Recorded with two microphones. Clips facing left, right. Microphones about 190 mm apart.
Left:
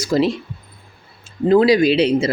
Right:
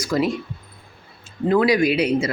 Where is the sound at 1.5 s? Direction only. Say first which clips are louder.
Left 4 dB; 30° left (ahead or behind).